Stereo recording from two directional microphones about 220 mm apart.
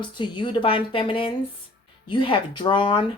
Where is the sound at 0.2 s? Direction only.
20° left (ahead or behind).